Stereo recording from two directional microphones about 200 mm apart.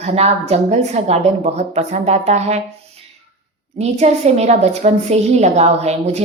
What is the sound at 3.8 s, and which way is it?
A woman's voice, 35° right (ahead or behind).